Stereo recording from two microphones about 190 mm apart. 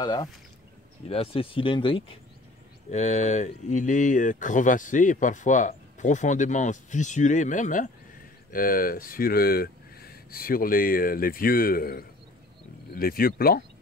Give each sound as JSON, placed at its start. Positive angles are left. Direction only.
{"t": 0.0, "sound": "speech", "side_deg": 20}
{"t": 1.0, "sound": "speech", "side_deg": 30}
{"t": 2.9, "sound": "speech", "side_deg": 40}